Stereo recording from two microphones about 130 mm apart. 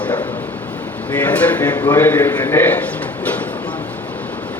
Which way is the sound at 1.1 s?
10° left (ahead or behind).